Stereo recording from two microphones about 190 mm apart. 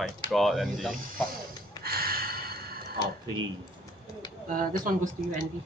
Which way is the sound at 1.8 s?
55° right (ahead or behind).